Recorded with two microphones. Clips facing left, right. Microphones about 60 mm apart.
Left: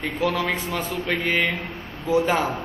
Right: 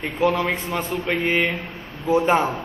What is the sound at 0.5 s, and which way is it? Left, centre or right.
A man's voice, right.